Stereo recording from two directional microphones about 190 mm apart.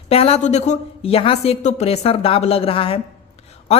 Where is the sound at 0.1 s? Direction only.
30° left (ahead or behind).